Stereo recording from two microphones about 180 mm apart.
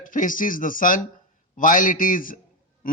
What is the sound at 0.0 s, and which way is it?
A man's voice, 50° left (ahead or behind).